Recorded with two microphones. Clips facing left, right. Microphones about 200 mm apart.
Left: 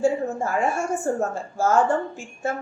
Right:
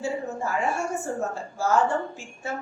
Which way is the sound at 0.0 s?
50° left (ahead or behind).